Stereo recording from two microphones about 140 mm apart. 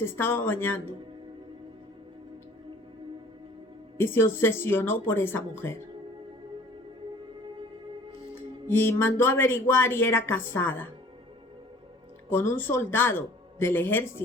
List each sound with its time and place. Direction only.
0.0 s speech: 15° left (ahead or behind)
3.9 s speech: 15° left (ahead or behind)
8.4 s speech: 15° left (ahead or behind)
12.3 s speech: 15° left (ahead or behind)